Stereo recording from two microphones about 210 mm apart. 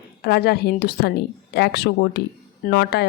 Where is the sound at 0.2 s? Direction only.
50° left (ahead or behind).